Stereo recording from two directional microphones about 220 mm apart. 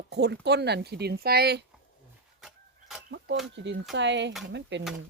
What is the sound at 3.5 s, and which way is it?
Speech, 55° right (ahead or behind).